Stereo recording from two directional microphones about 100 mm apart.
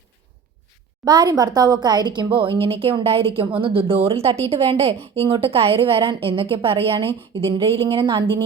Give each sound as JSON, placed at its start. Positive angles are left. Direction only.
{"t": 1.0, "sound": "a woman's voice", "side_deg": -45}